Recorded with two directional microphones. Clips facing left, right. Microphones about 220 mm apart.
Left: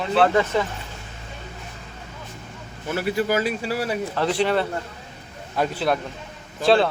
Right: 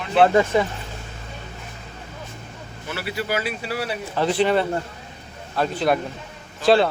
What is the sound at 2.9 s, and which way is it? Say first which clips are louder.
Speech: left 4 dB; 45° left (ahead or behind).